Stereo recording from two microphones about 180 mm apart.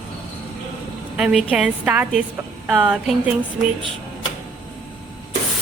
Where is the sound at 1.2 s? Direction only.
5° right (ahead or behind).